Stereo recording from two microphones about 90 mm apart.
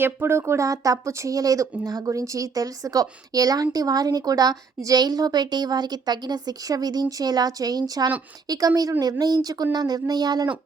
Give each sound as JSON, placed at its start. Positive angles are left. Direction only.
{"t": 0.0, "sound": "a woman's voice", "side_deg": -30}